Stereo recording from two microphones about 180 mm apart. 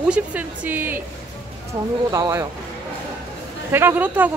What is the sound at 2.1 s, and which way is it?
Speech, 15° right (ahead or behind).